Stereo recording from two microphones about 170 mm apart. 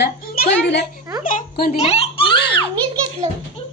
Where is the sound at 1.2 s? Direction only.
55° left (ahead or behind).